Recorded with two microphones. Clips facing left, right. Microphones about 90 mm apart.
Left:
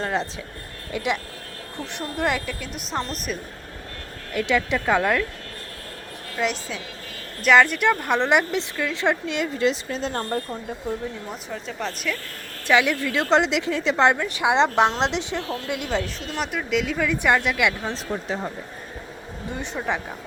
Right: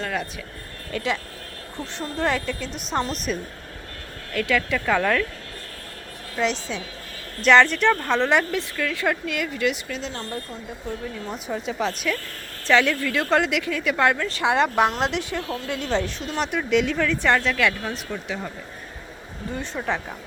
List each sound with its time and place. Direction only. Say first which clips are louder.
0.0 s a woman's voice: left 2 dB; 25° left (ahead or behind); by 3.3 s centre (ahead or behind)
4.3 s a woman's voice: left 1 dB; 20° left (ahead or behind)
6.3 s a woman's voice: right 1 dB; 5° left (ahead or behind); by 10.0 s 30° left (ahead or behind)
10.0 s speech: left 5 dB; 45° left (ahead or behind)
11.3 s a woman's voice: right 4 dB; 5° right (ahead or behind)
12.6 s a woman's voice: even; 15° left (ahead or behind)
15.9 s a woman's voice: right 2 dB; centre (ahead or behind)
17.9 s speech: left 3 dB; 30° left (ahead or behind)
19.5 s a woman's voice: even; 15° left (ahead or behind)